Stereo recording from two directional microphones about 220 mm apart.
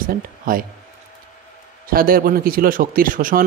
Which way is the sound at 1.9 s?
40° right (ahead or behind).